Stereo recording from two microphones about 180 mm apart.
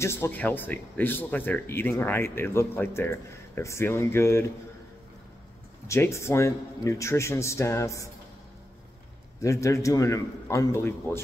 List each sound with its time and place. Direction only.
0.0 s speech: 15° left (ahead or behind)
5.9 s speech: 15° left (ahead or behind)
9.4 s speech: 15° left (ahead or behind)